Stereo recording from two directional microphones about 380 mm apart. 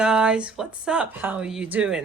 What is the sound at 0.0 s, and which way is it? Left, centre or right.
Speech, centre.